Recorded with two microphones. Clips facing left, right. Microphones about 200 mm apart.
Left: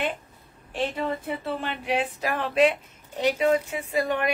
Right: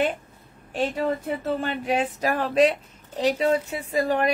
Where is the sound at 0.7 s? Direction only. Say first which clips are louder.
Right 3 dB; 45° right (ahead or behind).